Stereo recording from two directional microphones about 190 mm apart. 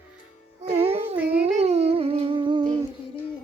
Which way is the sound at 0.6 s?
30° right (ahead or behind).